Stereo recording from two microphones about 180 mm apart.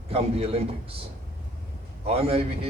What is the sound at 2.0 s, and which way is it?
Speech, 35° right (ahead or behind).